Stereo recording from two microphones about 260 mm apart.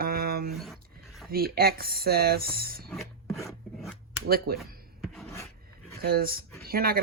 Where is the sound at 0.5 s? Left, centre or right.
Centre.